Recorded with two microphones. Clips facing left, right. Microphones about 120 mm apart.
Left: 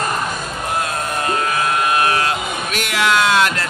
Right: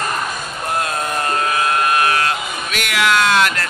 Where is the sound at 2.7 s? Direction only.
30° left (ahead or behind).